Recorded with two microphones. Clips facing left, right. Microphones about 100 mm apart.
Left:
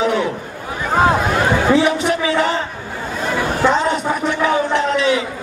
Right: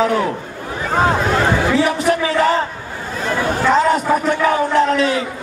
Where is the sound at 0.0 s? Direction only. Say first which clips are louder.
Right 1 dB; 40° right (ahead or behind).